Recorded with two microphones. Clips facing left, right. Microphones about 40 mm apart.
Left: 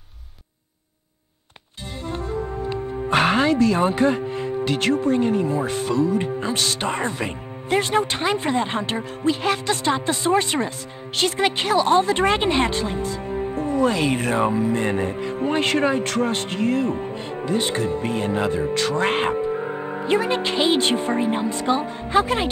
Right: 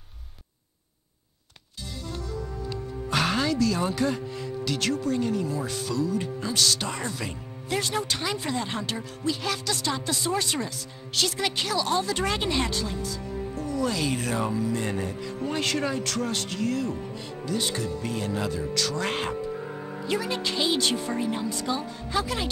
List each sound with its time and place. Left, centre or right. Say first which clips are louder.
2.0 s speech: left 9 dB; left